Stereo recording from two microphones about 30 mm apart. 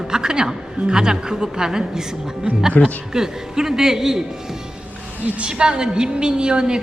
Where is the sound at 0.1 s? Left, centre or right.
Right.